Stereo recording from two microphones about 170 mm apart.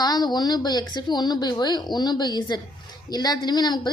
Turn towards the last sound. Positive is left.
turn(degrees=25)  # may be behind; listen again after turning